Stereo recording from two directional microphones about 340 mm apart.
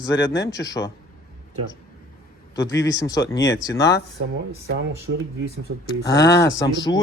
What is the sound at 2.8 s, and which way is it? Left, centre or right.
A man's voice, centre.